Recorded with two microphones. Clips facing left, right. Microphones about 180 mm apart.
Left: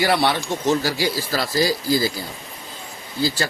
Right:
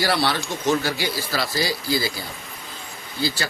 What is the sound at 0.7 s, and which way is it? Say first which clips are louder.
Speech: left 2 dB; 35° left (ahead or behind).